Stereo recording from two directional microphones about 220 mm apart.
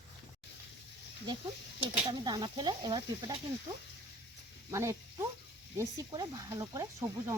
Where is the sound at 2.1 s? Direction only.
20° right (ahead or behind).